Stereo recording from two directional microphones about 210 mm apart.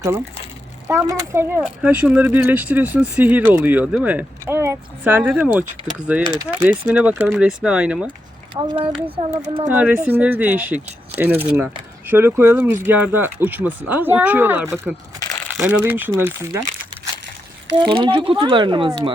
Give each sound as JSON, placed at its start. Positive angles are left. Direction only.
{"t": 0.9, "sound": "speech", "side_deg": -15}
{"t": 8.5, "sound": "speech", "side_deg": -20}
{"t": 9.6, "sound": "speech", "side_deg": -10}
{"t": 17.7, "sound": "speech", "side_deg": -25}